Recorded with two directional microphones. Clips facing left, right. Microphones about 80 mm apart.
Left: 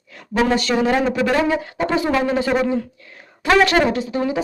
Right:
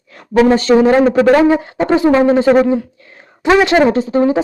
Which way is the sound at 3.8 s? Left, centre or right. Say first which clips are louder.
Right 7 dB; right.